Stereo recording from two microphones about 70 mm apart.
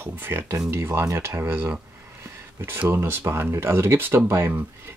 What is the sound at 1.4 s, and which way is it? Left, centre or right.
Speech, right.